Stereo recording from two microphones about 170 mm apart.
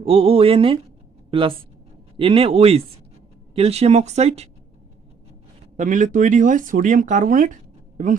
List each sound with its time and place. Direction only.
0.0 s speech: 35° right (ahead or behind)
5.7 s speech: 50° right (ahead or behind)